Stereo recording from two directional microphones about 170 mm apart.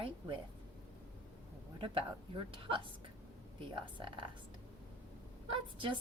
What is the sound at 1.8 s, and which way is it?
A woman's voice, 30° right (ahead or behind).